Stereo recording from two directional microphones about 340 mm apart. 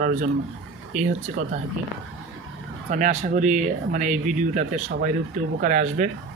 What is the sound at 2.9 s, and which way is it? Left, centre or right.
Speech, right.